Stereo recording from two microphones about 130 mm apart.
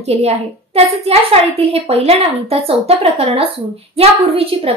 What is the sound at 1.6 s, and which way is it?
A woman's voice, 50° right (ahead or behind).